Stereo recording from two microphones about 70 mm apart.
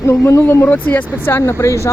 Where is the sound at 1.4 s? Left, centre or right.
Left.